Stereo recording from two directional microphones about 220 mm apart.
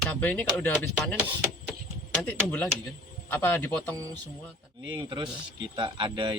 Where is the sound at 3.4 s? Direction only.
10° left (ahead or behind).